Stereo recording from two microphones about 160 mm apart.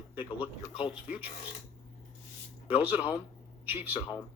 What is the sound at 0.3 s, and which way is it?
Speech, 5° right (ahead or behind).